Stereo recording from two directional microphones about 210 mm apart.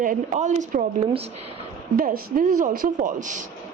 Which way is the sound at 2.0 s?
40° right (ahead or behind).